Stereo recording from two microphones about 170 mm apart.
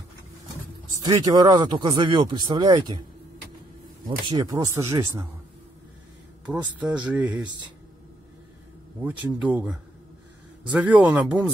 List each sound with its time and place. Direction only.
1.0 s speech: 25° right (ahead or behind)
4.2 s speech: 20° right (ahead or behind)
6.4 s speech: 5° right (ahead or behind)
9.0 s speech: 10° right (ahead or behind)